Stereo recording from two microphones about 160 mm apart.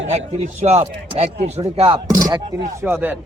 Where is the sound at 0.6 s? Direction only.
45° right (ahead or behind).